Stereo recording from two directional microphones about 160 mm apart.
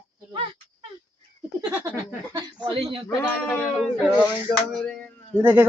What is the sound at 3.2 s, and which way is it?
Speech, 10° left (ahead or behind).